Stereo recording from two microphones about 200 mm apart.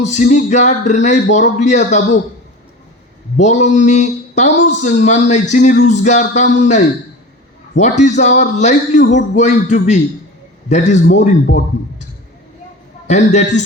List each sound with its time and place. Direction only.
0.0 s speech: 40° left (ahead or behind)
3.3 s speech: 35° left (ahead or behind)
13.1 s speech: 35° left (ahead or behind)